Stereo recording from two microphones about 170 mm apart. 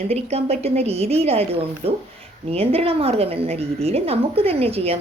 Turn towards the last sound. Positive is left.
turn(degrees=-35)  # may be behind; listen again after turning